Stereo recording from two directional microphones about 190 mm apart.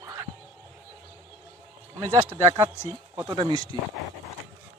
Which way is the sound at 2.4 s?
15° right (ahead or behind).